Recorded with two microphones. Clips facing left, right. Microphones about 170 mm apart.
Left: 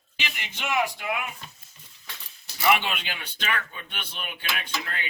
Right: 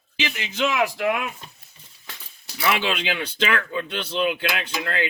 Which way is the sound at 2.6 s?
90° right.